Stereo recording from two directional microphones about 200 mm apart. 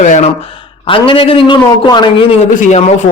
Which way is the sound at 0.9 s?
25° left (ahead or behind).